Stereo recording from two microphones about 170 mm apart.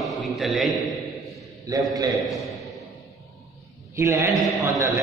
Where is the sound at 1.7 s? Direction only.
20° right (ahead or behind).